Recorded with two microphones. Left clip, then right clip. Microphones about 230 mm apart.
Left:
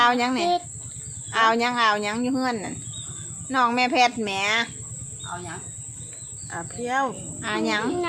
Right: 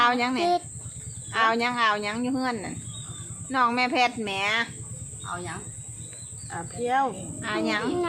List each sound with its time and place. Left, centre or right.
0.0 s speech: left
6.5 s speech: left